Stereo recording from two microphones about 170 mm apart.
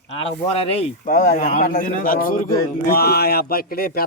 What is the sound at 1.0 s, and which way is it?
A man's voice, 55° left (ahead or behind).